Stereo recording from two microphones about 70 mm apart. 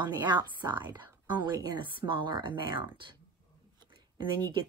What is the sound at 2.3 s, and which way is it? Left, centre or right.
Speech, right.